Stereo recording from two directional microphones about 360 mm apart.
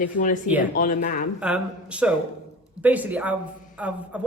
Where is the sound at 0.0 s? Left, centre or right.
Left.